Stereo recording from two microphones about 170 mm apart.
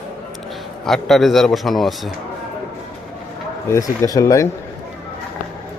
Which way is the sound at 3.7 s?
20° left (ahead or behind).